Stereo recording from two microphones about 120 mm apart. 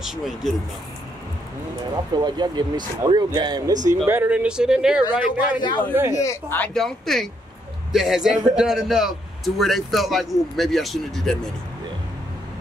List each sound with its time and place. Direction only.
0.0 s a man's voice: 5° right (ahead or behind)
2.1 s speech: 35° right (ahead or behind)
3.9 s speech: 20° right (ahead or behind)
5.6 s speech: 40° left (ahead or behind)
6.1 s speech: 25° left (ahead or behind)
6.6 s a man's voice: 5° left (ahead or behind)